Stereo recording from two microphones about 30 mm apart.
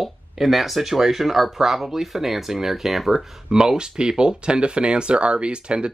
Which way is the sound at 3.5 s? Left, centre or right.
Right.